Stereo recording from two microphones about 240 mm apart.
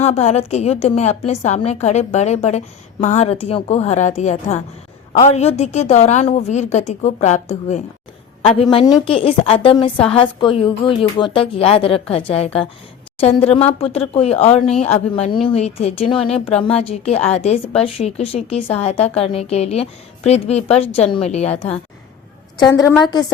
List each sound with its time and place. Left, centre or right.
0.0 s a woman's voice: left
13.7 s a woman's voice: left
22.8 s a woman's voice: centre